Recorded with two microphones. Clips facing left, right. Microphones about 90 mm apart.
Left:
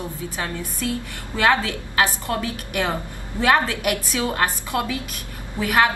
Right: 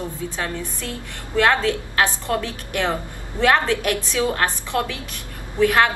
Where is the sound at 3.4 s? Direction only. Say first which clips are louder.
Right 1 dB; 15° left (ahead or behind).